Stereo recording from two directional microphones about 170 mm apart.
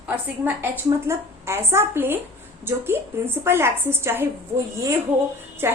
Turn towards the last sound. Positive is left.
turn(degrees=-15)  # may be behind; listen again after turning